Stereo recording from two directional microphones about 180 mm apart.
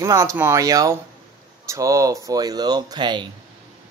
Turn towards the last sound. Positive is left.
turn(degrees=-25)  # may be behind; listen again after turning